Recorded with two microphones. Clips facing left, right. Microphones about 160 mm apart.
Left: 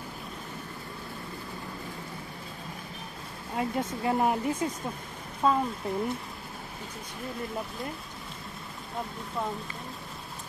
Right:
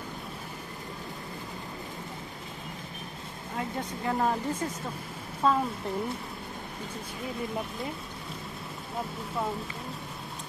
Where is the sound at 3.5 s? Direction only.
20° left (ahead or behind); by 6.0 s centre (ahead or behind).